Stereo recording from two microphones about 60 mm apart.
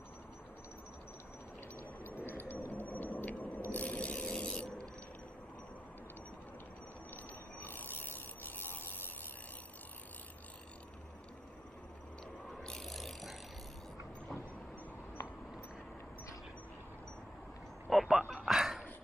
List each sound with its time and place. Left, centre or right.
2.2 s vehicle: left
2.7 s a sound: left
3.7 s mechanisms: left
7.6 s rub: left
12.5 s rub: centre
17.8 s a sound: centre